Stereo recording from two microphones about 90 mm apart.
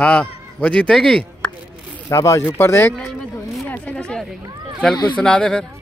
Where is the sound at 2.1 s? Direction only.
35° left (ahead or behind).